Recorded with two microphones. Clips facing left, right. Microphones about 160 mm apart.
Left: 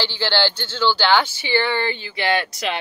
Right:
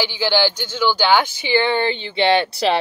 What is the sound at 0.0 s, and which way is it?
Speech, 15° right (ahead or behind).